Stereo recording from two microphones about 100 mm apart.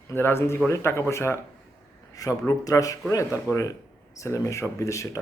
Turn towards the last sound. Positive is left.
turn(degrees=30)  # may be behind; listen again after turning